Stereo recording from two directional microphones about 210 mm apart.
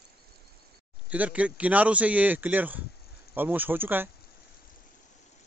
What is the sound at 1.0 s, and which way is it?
Speech, 5° right (ahead or behind).